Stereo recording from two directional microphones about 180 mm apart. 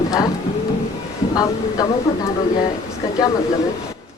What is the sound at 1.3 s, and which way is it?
Speech, 20° left (ahead or behind).